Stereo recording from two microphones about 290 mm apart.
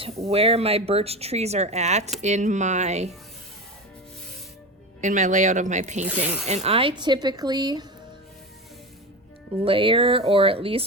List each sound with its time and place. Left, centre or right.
0.0 s speech: centre
4.9 s speech: right
6.1 s speech: centre
6.5 s speech: right
9.6 s speech: centre